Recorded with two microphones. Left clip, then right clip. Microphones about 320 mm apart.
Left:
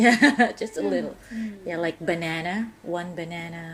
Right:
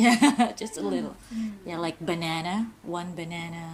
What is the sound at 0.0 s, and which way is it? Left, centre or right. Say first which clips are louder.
A woman's voice: left 3 dB; centre.